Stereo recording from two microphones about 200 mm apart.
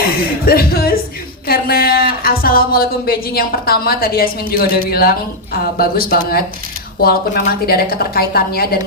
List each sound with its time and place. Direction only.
0.4 s speech: 50° left (ahead or behind)